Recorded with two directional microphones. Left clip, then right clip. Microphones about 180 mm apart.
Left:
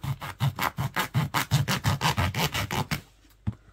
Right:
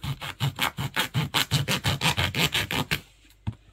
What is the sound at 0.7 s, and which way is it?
Scratch, 10° left (ahead or behind).